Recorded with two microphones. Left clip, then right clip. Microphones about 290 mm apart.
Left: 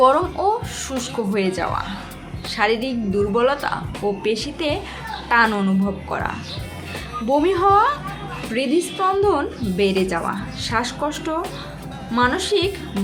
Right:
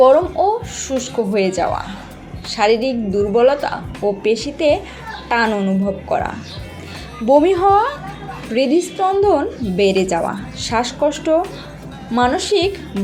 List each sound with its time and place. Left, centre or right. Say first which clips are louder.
0.0 s a woman's voice: right 4 dB; centre